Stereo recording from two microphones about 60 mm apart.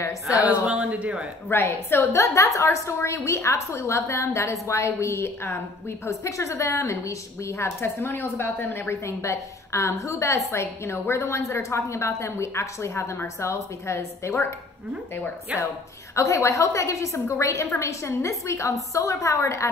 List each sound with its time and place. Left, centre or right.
0.5 s a woman's voice: centre
1.5 s a woman's voice: left
8.0 s speech: left
9.0 s a woman's voice: left
10.5 s a woman's voice: left
15.5 s a woman's voice: right
16.2 s a woman's voice: left